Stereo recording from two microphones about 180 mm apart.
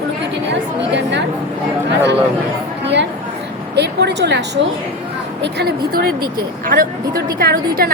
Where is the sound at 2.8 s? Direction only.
75° right (ahead or behind).